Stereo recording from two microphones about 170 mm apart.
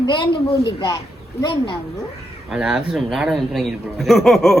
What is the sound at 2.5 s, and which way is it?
A man's voice, 5° right (ahead or behind).